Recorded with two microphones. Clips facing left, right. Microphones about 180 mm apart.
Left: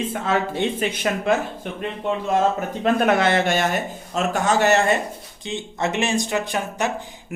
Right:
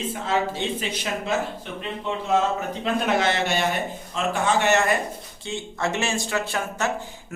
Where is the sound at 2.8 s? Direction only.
55° left (ahead or behind); by 5.0 s 30° left (ahead or behind).